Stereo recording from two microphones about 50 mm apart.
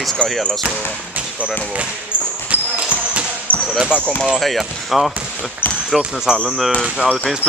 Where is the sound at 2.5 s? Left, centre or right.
Right.